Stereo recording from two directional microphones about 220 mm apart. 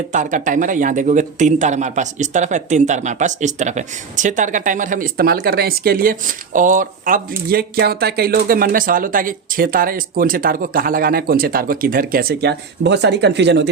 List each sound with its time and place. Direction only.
0.1 s speech: 35° right (ahead or behind); by 13.7 s 50° right (ahead or behind)